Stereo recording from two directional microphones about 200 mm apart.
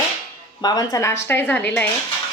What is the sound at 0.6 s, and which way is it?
A woman's voice, 20° left (ahead or behind).